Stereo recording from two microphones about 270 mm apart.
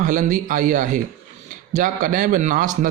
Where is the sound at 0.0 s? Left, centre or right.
Right.